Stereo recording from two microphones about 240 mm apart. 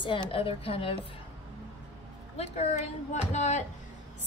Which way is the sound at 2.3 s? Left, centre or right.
Left.